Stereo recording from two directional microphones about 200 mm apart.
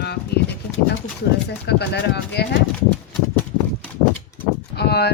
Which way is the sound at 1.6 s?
55° left (ahead or behind).